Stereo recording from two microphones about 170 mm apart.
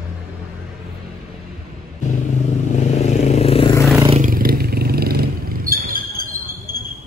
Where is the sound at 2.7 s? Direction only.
40° left (ahead or behind).